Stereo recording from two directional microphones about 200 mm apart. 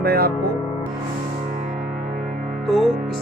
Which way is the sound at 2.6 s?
Centre (ahead or behind).